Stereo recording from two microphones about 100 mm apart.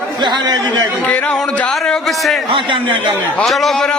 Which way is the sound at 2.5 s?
60° right (ahead or behind).